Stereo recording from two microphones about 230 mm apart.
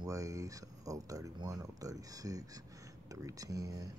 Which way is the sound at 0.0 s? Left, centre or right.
Centre.